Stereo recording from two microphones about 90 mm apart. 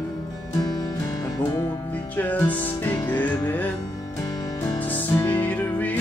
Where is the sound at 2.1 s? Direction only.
20° left (ahead or behind).